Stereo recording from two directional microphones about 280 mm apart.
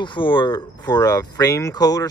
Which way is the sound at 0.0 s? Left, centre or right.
Centre.